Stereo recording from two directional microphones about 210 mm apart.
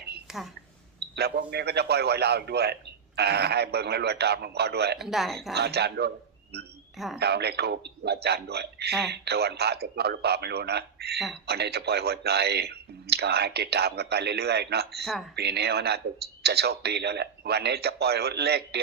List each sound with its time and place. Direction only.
0.3 s a woman's voice: centre (ahead or behind)
1.1 s a man's voice: 50° right (ahead or behind)
4.9 s speech: centre (ahead or behind)
5.5 s a man's voice: 50° right (ahead or behind)
7.2 s a man's voice: 50° right (ahead or behind)